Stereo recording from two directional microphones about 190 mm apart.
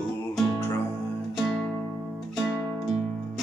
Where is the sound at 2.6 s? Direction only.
Centre (ahead or behind).